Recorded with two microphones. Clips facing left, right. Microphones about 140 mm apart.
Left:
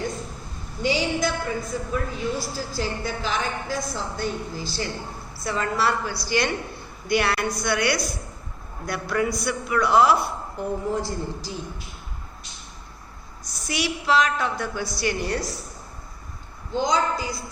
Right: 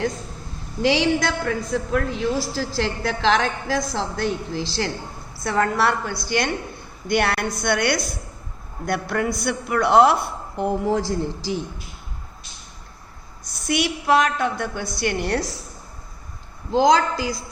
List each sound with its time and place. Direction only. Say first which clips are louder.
0.8 s a woman's voice: right 4 dB; 90° right
5.4 s a woman's voice: right 4 dB; 60° right (ahead or behind)
10.6 s a woman's voice: right 5 dB; 85° right
13.7 s a woman's voice: right 4 dB; 55° right (ahead or behind)
16.7 s a woman's voice: right 6 dB; 90° right